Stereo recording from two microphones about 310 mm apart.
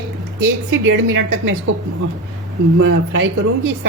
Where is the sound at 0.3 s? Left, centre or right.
Right.